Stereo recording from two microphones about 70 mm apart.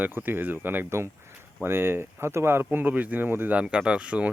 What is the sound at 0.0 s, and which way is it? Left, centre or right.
Speech, right.